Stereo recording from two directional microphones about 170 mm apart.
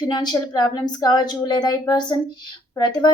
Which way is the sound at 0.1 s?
25° left (ahead or behind).